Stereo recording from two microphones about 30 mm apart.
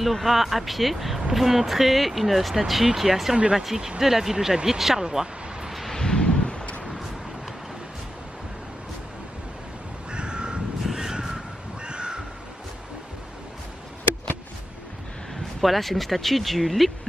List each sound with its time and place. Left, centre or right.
0.0 s speech: centre
5.0 s a sound: right
5.7 s a sound: centre
5.9 s a sound: left
6.8 s vehicle: centre
10.1 s crow: right
10.8 s crow: centre
11.8 s crow: right
15.6 s speech: centre